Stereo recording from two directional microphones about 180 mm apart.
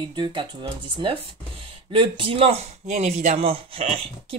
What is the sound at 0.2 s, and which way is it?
Speech, 25° right (ahead or behind).